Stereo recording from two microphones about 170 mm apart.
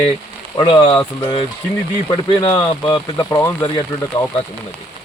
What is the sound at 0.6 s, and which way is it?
Speech, 25° left (ahead or behind).